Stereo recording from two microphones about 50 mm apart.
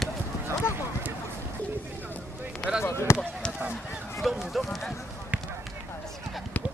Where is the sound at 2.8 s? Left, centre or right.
Left.